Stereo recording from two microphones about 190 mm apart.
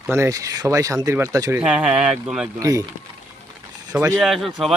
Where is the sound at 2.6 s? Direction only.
15° right (ahead or behind).